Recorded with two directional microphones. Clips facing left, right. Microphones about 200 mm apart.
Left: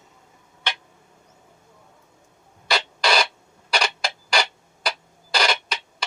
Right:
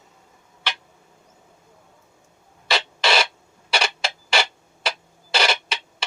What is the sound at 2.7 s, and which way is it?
Rodents, centre (ahead or behind).